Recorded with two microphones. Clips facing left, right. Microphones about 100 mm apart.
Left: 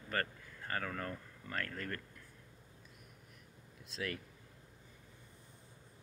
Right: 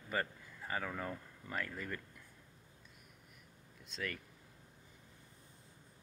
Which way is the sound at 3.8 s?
Centre (ahead or behind).